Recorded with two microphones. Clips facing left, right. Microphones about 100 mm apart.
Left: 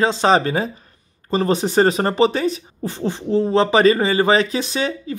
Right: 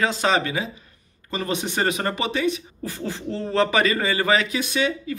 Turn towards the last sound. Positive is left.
turn(degrees=30)  # may be behind; listen again after turning